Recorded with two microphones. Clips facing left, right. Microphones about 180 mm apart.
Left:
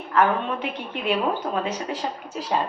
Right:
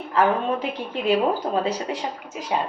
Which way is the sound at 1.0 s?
35° right (ahead or behind).